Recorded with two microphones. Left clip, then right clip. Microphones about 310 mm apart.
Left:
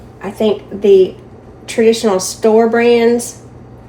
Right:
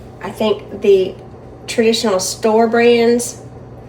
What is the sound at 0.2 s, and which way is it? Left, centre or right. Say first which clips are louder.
A woman's voice: left 2 dB; left.